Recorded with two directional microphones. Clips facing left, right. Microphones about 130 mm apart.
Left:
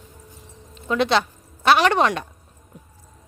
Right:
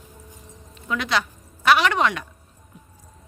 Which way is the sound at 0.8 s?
30° left (ahead or behind).